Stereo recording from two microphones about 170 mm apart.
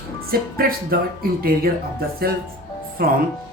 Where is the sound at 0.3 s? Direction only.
60° right (ahead or behind).